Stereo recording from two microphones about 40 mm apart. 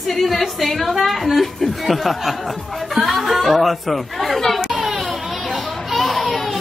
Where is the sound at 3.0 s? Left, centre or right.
Centre.